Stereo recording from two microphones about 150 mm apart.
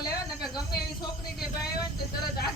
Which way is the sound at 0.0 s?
25° left (ahead or behind).